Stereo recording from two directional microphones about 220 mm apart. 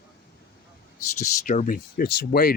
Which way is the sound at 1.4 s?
35° left (ahead or behind).